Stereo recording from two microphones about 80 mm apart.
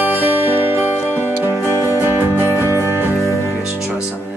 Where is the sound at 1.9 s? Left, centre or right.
Right.